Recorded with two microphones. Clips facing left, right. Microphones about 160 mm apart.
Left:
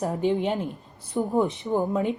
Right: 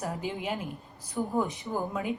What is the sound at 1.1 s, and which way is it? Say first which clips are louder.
A woman's voice: left 6 dB; 20° left (ahead or behind).